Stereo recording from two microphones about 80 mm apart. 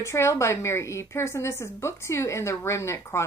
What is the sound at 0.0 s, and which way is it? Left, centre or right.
A woman's voice, left.